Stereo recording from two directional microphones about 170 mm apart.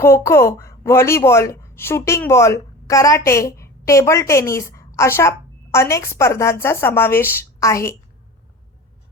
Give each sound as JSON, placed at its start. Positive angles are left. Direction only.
{"t": 0.0, "sound": "a woman's voice", "side_deg": 15}